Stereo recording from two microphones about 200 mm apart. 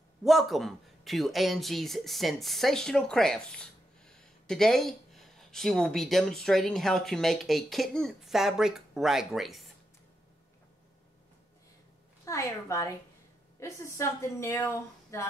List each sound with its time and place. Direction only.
0.2 s a man's voice: centre (ahead or behind)
12.3 s speech: 15° left (ahead or behind)